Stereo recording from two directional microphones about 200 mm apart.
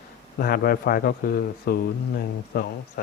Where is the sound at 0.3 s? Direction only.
50° left (ahead or behind).